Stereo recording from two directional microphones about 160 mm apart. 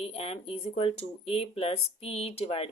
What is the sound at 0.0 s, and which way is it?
A woman's voice, 40° left (ahead or behind).